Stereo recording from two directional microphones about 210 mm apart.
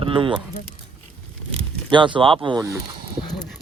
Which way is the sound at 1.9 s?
20° right (ahead or behind).